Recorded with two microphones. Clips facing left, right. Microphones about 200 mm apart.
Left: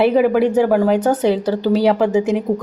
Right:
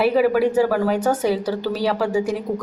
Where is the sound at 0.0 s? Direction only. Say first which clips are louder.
Left 3 dB; 20° left (ahead or behind).